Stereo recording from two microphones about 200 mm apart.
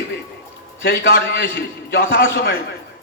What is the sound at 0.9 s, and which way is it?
A man's voice, 60° left (ahead or behind).